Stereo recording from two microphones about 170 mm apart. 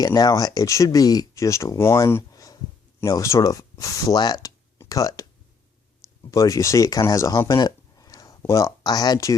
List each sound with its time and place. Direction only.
0.0 s speech: 20° left (ahead or behind)
6.3 s speech: 20° left (ahead or behind)